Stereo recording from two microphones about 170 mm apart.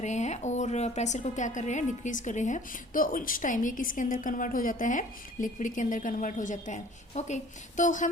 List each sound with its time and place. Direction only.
0.0 s a woman's voice: 45° left (ahead or behind)